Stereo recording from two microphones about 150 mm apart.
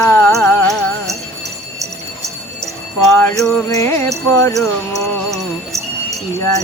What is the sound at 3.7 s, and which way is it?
Speech, 20° left (ahead or behind).